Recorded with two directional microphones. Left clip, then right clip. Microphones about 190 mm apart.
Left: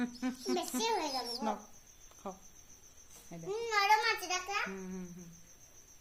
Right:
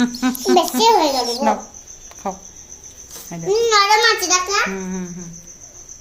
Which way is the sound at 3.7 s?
55° left (ahead or behind).